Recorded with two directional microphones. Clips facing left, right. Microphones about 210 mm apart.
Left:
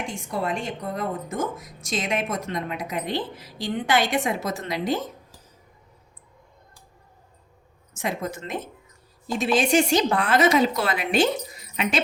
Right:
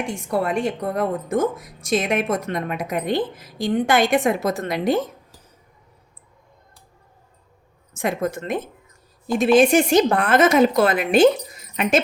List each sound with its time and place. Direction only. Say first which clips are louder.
0.1 s a woman's voice: right 6 dB; 60° right (ahead or behind)
7.9 s a woman's voice: right 6 dB; 55° right (ahead or behind)